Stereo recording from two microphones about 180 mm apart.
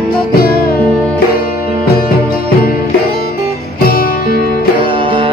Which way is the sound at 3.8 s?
55° left (ahead or behind).